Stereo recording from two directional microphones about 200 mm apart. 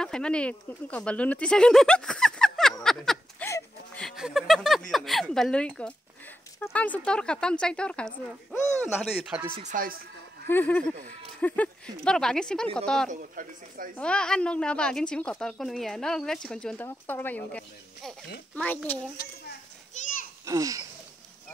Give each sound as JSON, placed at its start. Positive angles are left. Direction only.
{"t": 0.0, "sound": "speech", "side_deg": 5}
{"t": 2.8, "sound": "a sound", "side_deg": 0}
{"t": 3.4, "sound": "a sound", "side_deg": 15}
{"t": 4.0, "sound": "a woman's voice", "side_deg": 0}
{"t": 9.6, "sound": "speech", "side_deg": -40}
{"t": 10.4, "sound": "a woman's voice", "side_deg": 10}
{"t": 13.1, "sound": "speech", "side_deg": -40}
{"t": 13.9, "sound": "a woman's voice", "side_deg": 5}
{"t": 19.9, "sound": "children playing", "side_deg": 40}
{"t": 20.4, "sound": "laughter", "side_deg": -15}